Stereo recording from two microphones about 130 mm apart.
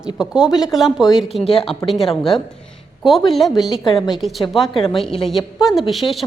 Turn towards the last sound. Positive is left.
turn(degrees=0)  # may be behind; listen again after turning